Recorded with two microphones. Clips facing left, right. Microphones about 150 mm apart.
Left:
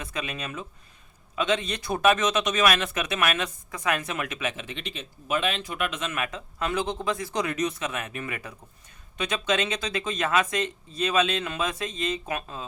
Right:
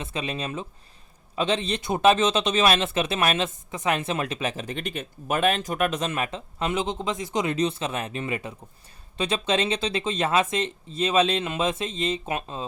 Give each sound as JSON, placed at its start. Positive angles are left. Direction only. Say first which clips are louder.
{"t": 0.0, "sound": "speech", "louder": "right 3 dB", "side_deg": -25}